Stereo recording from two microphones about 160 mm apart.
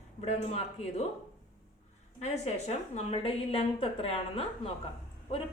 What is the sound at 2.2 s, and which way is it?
A woman's voice, 40° left (ahead or behind).